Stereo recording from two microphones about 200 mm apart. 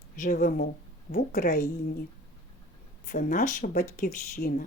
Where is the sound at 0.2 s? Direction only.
45° left (ahead or behind).